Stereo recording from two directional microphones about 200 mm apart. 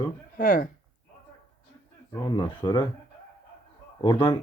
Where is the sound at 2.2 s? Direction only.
20° left (ahead or behind).